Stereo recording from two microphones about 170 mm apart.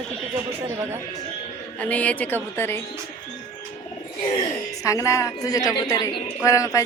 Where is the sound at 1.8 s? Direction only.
10° left (ahead or behind).